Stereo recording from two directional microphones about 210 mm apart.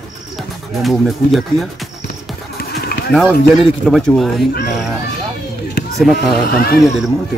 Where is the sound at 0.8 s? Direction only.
Centre (ahead or behind).